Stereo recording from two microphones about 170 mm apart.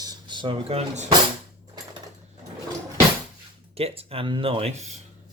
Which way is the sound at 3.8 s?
35° right (ahead or behind).